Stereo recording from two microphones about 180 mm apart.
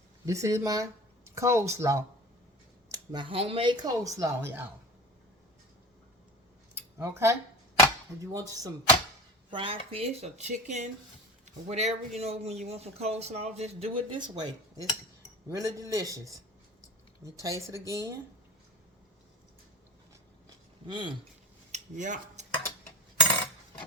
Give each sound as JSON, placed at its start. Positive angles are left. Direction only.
{"t": 0.3, "sound": "speech", "side_deg": -15}
{"t": 6.7, "sound": "a sound", "side_deg": -15}
{"t": 8.2, "sound": "speech", "side_deg": -20}
{"t": 9.5, "sound": "speech", "side_deg": -30}
{"t": 20.8, "sound": "speech", "side_deg": -25}
{"t": 21.7, "sound": "a sound", "side_deg": -45}